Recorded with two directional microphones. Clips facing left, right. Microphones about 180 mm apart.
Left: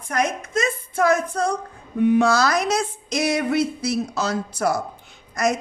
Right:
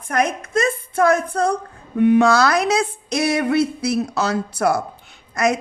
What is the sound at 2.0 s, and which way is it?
A woman's voice, 70° right (ahead or behind).